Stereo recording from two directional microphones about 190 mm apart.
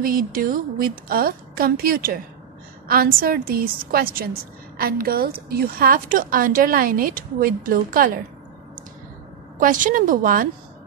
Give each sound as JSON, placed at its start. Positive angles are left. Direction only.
{"t": 0.0, "sound": "a woman's voice", "side_deg": -50}
{"t": 9.6, "sound": "a woman's voice", "side_deg": -45}